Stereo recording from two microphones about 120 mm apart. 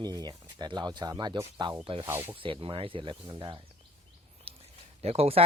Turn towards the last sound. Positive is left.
turn(degrees=-55)  # may be behind; listen again after turning